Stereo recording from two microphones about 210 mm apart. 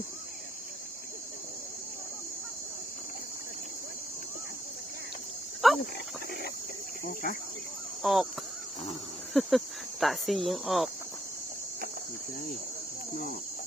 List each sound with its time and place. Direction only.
5.6 s a sound: centre (ahead or behind)
7.0 s speech: 45° left (ahead or behind)
8.0 s speech: centre (ahead or behind)
9.3 s speech: centre (ahead or behind)